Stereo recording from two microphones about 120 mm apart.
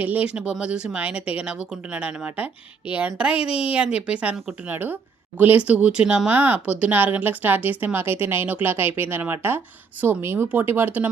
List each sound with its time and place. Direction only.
0.0 s speech: 15° right (ahead or behind)